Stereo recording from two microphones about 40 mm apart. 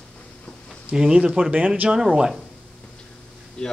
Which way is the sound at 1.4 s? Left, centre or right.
Right.